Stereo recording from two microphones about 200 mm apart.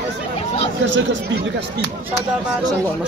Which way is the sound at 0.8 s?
65° right (ahead or behind).